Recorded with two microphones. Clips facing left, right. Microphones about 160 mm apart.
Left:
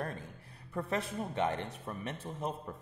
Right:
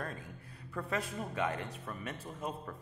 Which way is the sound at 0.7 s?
25° left (ahead or behind).